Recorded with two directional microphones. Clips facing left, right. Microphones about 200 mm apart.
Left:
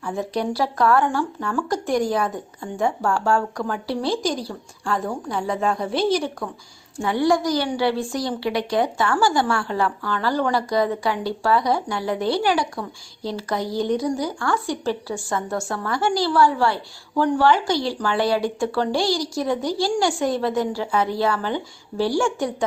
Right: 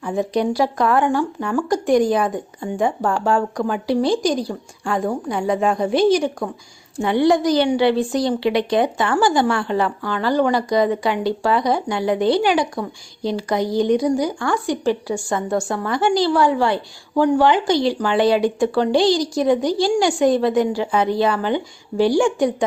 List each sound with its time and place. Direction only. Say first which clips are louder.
0.0 s a woman's voice: right 5 dB; 20° right (ahead or behind)